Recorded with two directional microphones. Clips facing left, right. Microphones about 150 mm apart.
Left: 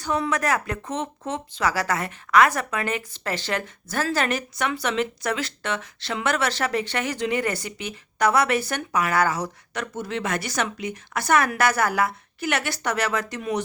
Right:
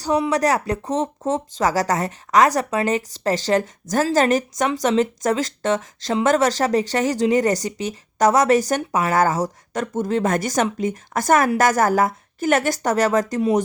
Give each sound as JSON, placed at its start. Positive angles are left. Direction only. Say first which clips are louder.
{"t": 0.3, "sound": "speech", "louder": "right 5 dB", "side_deg": -35}